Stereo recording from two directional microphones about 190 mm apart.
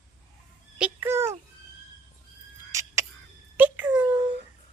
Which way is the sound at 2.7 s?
15° right (ahead or behind).